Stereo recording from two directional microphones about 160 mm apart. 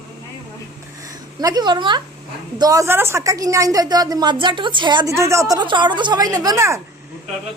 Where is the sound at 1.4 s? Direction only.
25° right (ahead or behind).